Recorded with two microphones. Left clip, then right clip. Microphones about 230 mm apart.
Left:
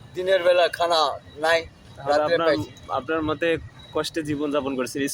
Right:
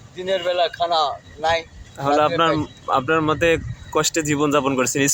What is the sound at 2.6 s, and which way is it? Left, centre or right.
Speech, right.